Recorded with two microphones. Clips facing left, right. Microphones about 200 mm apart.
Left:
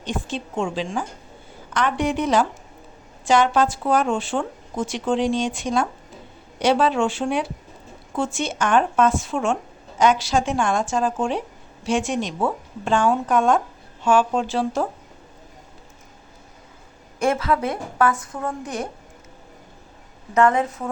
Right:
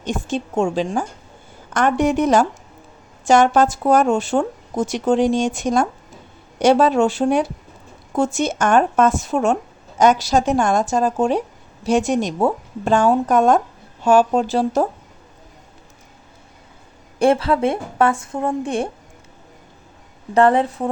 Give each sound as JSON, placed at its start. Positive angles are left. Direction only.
{"t": 0.0, "sound": "speech", "side_deg": -45}
{"t": 17.2, "sound": "a woman's voice", "side_deg": -30}
{"t": 20.3, "sound": "speech", "side_deg": -30}